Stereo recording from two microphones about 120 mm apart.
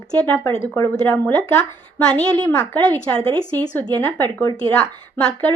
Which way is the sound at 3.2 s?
50° right (ahead or behind).